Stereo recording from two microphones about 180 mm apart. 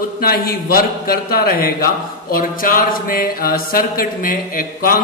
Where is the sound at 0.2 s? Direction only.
55° left (ahead or behind).